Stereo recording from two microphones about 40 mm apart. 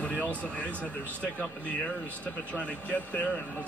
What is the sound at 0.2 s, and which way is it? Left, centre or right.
Speech, left.